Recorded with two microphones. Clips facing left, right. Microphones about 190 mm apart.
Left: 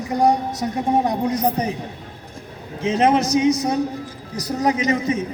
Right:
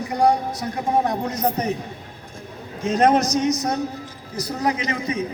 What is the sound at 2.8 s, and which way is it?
Speech, 10° left (ahead or behind).